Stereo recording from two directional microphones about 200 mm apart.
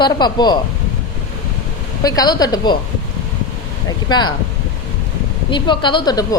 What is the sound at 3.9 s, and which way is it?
Speech, 20° left (ahead or behind).